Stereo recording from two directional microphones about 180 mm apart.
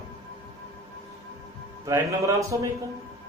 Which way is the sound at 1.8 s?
15° right (ahead or behind).